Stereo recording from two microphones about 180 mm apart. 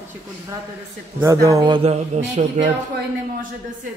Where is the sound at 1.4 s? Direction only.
20° right (ahead or behind); by 2.6 s 40° right (ahead or behind).